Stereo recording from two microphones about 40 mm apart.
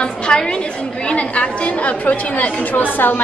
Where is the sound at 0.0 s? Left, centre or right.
Left.